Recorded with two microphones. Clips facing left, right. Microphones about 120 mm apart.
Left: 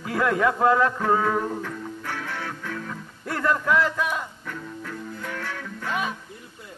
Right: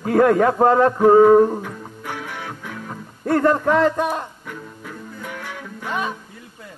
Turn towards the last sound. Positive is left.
turn(degrees=-15)  # may be behind; listen again after turning